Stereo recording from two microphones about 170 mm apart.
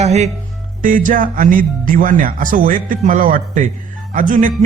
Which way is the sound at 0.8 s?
55° right (ahead or behind).